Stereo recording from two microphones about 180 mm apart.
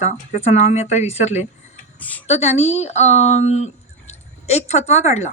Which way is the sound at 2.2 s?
40° left (ahead or behind).